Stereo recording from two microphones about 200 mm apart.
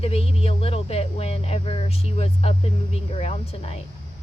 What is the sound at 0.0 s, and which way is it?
Speech, 30° left (ahead or behind).